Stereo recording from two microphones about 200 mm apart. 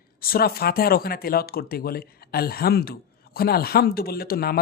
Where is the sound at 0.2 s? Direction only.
50° left (ahead or behind).